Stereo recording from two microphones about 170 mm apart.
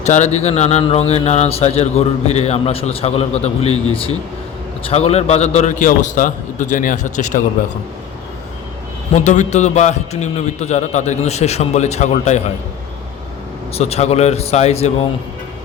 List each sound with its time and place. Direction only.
0.0 s a man's voice: 40° left (ahead or behind)
9.1 s a man's voice: 45° left (ahead or behind)
13.7 s speech: 40° left (ahead or behind)